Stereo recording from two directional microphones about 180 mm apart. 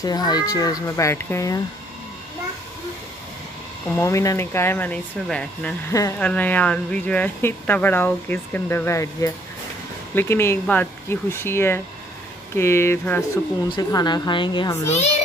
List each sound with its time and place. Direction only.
0.0 s speech: 20° left (ahead or behind)
3.9 s speech: 15° left (ahead or behind)
13.7 s speech: 20° left (ahead or behind)